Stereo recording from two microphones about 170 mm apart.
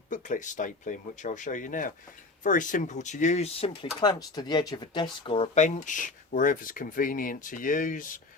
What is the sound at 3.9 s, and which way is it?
Speech, 25° left (ahead or behind).